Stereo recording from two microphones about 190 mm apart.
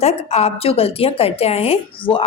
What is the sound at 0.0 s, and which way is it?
A woman's voice, 30° left (ahead or behind).